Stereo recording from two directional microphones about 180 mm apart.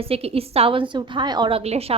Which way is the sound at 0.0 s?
35° right (ahead or behind).